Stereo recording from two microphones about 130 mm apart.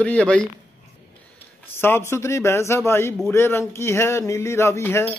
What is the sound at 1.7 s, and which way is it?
Speech, 20° left (ahead or behind).